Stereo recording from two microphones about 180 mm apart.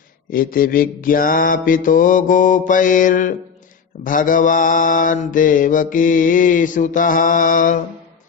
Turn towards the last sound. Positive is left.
turn(degrees=50)  # may be behind; listen again after turning